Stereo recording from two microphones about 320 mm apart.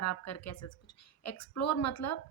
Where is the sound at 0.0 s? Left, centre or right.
Left.